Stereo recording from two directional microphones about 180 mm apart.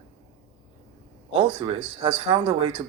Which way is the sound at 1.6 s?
25° right (ahead or behind).